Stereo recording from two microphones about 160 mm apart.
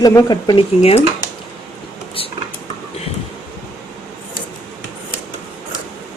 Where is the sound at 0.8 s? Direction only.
45° left (ahead or behind).